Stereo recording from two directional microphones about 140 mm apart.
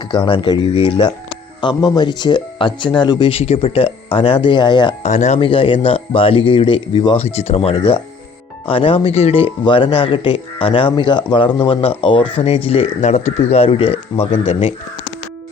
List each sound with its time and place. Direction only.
0.0 s speech: 35° left (ahead or behind)
5.0 s speech: 55° left (ahead or behind)
5.4 s speech: 40° left (ahead or behind)
7.2 s speech: 50° left (ahead or behind)